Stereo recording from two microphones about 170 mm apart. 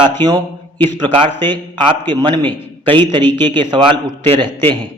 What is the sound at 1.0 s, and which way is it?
A man's voice, 30° right (ahead or behind).